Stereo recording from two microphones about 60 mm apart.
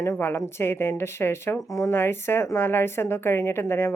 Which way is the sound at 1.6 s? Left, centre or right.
Left.